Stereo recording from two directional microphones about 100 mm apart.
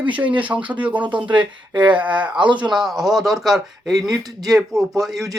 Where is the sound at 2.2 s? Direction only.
55° right (ahead or behind).